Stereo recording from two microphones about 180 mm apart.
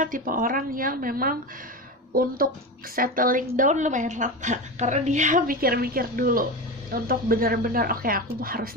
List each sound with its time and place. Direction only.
0.0 s a woman's voice: 50° right (ahead or behind)